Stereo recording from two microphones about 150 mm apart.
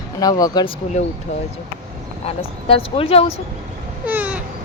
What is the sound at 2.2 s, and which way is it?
Speech, 40° left (ahead or behind).